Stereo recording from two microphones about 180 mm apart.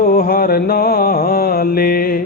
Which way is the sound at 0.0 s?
50° left (ahead or behind).